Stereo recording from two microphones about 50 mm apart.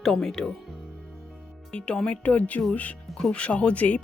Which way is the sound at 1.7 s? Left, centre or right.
Centre.